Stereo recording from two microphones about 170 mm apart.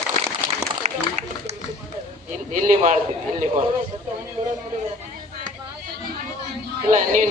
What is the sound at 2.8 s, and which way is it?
Speech, 55° right (ahead or behind).